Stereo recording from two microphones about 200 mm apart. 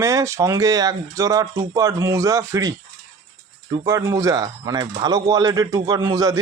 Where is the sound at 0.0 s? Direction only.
15° right (ahead or behind).